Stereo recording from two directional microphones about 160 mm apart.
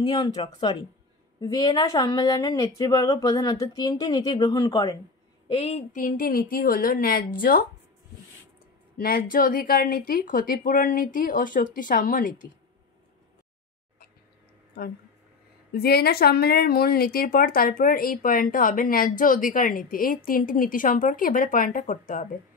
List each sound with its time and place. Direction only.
0.0 s speech: 25° left (ahead or behind)
5.5 s a woman's voice: 40° left (ahead or behind)
6.0 s a woman's voice: 60° left (ahead or behind)
8.9 s a woman's voice: 65° left (ahead or behind)
15.7 s a woman's voice: 75° left (ahead or behind); by 22.2 s 55° left (ahead or behind)